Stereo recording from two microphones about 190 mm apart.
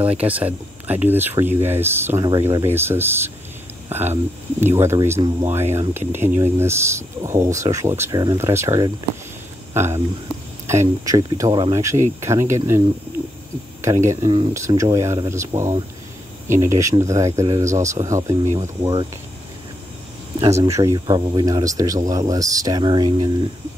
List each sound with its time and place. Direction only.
0.0 s speech: 10° right (ahead or behind)
18.4 s speech: 40° right (ahead or behind)
18.8 s speech: 20° right (ahead or behind)
20.5 s speech: 15° right (ahead or behind)